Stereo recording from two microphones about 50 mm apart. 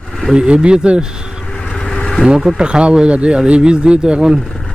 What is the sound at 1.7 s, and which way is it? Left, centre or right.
Vehicle, centre.